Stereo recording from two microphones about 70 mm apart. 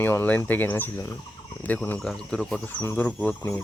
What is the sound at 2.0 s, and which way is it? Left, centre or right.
Speech, centre.